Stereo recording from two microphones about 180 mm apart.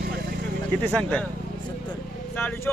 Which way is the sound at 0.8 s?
5° left (ahead or behind).